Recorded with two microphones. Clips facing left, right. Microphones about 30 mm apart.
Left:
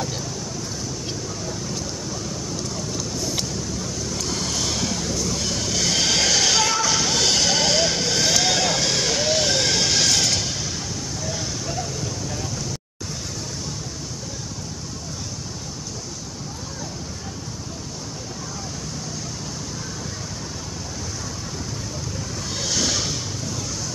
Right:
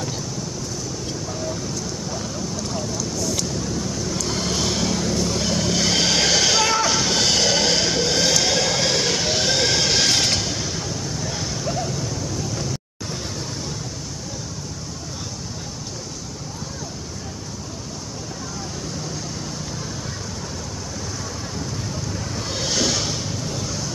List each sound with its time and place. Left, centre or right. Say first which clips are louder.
4.3 s vehicle: right 2 dB; centre
5.1 s vehicle: right 3 dB; right
5.4 s vehicle: right 3 dB; centre
6.0 s music: even; centre
10.0 s vehicle: right 1 dB; right
11.2 s a sound: right 1 dB; centre
22.6 s a sound: right 1 dB; centre